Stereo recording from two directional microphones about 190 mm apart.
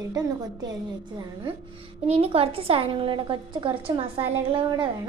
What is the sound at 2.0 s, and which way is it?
A woman's voice, 30° right (ahead or behind).